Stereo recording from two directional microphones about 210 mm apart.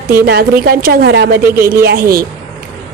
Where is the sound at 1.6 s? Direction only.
45° right (ahead or behind).